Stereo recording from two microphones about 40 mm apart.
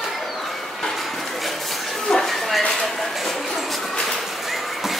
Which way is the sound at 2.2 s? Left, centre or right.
Centre.